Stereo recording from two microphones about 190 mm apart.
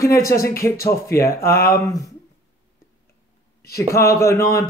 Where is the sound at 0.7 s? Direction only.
50° left (ahead or behind).